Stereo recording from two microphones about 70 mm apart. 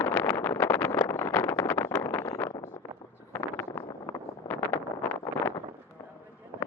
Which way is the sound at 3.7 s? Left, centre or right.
Left.